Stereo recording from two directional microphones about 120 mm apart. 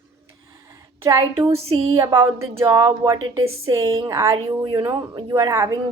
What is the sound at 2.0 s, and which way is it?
A woman's voice, 35° right (ahead or behind).